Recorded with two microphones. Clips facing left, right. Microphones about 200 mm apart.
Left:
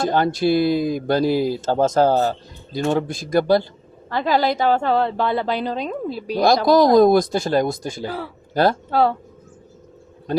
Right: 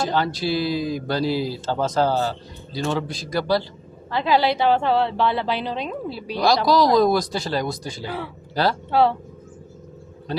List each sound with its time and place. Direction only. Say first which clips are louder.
0.0 s a woman's voice: left 4 dB; 50° left (ahead or behind)
10.3 s a woman's voice: left 6 dB; 50° left (ahead or behind)